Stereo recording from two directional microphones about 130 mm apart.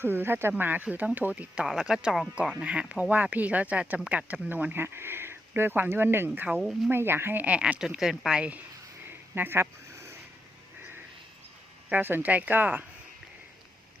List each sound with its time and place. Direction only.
0.0 s speech: 15° right (ahead or behind)
6.9 s speech: 20° right (ahead or behind)
9.0 s a sound: 15° right (ahead or behind)
11.9 s speech: 15° right (ahead or behind)